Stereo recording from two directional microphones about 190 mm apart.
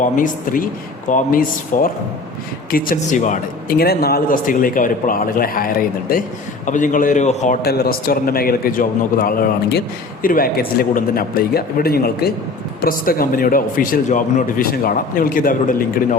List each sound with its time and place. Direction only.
0.0 s a man's voice: 45° left (ahead or behind)
7.6 s a man's voice: 55° left (ahead or behind)